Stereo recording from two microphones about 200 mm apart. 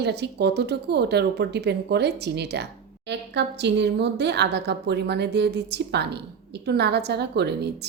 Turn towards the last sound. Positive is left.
turn(degrees=-55)  # may be behind; listen again after turning